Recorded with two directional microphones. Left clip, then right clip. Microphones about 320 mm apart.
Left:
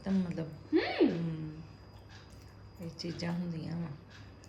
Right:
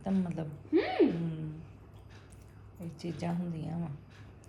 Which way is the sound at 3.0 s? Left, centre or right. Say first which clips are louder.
Right 1 dB; centre.